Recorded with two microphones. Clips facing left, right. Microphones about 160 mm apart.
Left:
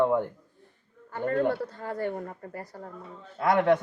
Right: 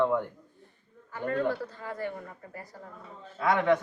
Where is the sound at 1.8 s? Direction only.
45° left (ahead or behind).